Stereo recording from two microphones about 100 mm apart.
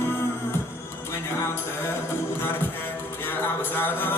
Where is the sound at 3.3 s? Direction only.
20° left (ahead or behind).